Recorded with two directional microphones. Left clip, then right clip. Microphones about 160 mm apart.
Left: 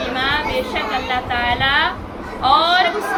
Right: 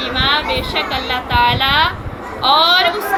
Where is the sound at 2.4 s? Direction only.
40° right (ahead or behind).